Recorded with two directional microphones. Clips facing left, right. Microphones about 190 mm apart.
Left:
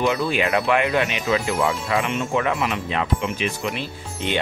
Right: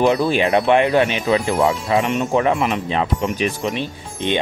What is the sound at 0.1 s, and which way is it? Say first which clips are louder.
Speech: right 5 dB; 35° right (ahead or behind).